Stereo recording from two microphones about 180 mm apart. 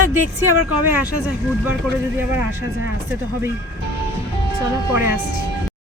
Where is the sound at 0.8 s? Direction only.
10° right (ahead or behind).